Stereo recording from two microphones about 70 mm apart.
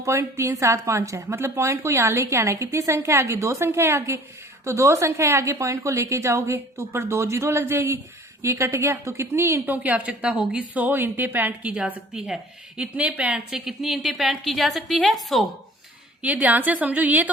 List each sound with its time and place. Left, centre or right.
0.0 s a woman's voice: right
9.6 s a woman's voice: right; by 15.4 s centre
16.2 s a woman's voice: right